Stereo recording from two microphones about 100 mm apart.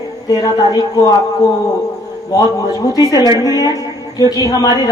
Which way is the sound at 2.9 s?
35° left (ahead or behind).